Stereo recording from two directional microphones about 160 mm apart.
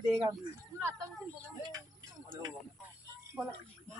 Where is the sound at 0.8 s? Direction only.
15° right (ahead or behind).